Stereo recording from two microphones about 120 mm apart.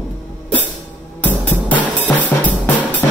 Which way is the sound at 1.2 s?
15° left (ahead or behind).